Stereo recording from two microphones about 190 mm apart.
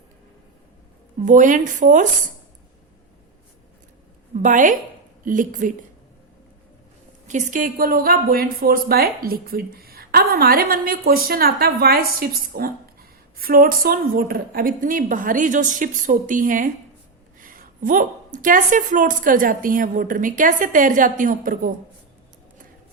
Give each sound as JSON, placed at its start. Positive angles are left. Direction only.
{"t": 1.2, "sound": "a woman's voice", "side_deg": -45}
{"t": 4.4, "sound": "a woman's voice", "side_deg": -45}
{"t": 7.3, "sound": "a woman's voice", "side_deg": -40}